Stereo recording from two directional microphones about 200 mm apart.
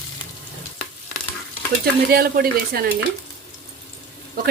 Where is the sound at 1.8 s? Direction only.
50° right (ahead or behind).